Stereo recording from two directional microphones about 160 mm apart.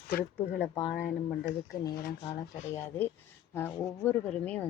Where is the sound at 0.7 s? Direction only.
25° left (ahead or behind).